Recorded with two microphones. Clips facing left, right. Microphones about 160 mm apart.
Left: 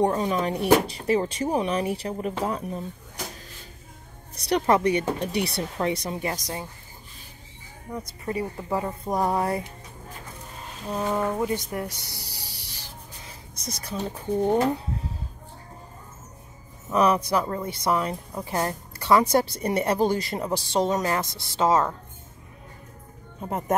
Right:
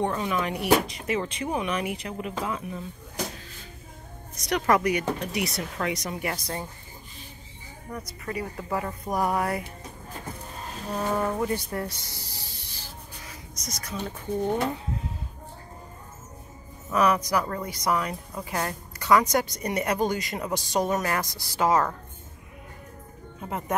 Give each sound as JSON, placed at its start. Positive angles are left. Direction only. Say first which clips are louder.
{"t": 0.0, "sound": "speech", "louder": "left 4 dB", "side_deg": 35}
{"t": 4.4, "sound": "a woman's voice", "louder": "left 2 dB", "side_deg": 30}
{"t": 7.9, "sound": "a woman's voice", "louder": "left 3 dB", "side_deg": 20}
{"t": 11.1, "sound": "speech", "louder": "left 1 dB", "side_deg": 15}
{"t": 13.3, "sound": "speech", "louder": "left 3 dB", "side_deg": 30}
{"t": 16.9, "sound": "a woman's voice", "louder": "left 2 dB", "side_deg": 30}